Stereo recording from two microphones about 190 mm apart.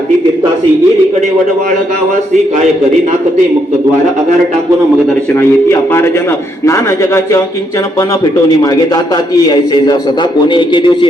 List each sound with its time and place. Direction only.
5.3 s a man's voice: 15° left (ahead or behind)
8.4 s a man's voice: 20° left (ahead or behind)